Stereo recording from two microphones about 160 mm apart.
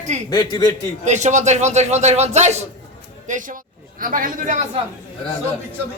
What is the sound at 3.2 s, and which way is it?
A man's voice, 55° right (ahead or behind).